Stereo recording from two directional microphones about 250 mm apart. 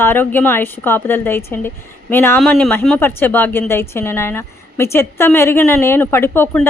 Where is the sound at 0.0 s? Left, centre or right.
Centre.